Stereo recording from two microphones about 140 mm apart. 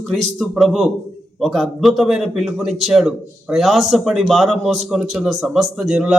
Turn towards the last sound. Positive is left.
turn(degrees=0)  # may be behind; listen again after turning